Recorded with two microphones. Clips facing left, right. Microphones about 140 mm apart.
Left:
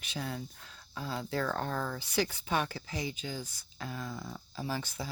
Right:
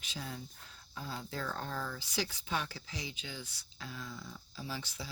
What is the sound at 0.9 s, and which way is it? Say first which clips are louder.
Speech: left 7 dB; 90° left.